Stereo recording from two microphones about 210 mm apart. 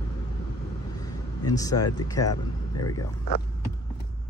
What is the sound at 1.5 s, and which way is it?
Speech, 15° left (ahead or behind).